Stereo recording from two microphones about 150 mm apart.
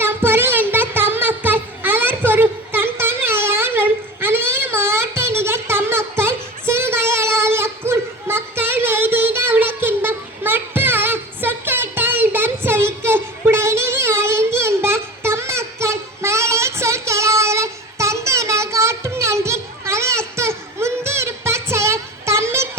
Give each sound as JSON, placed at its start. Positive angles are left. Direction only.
{"t": 0.0, "sound": "music", "side_deg": -15}